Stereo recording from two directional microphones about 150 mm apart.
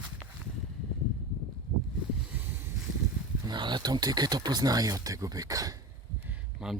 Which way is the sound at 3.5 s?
30° right (ahead or behind).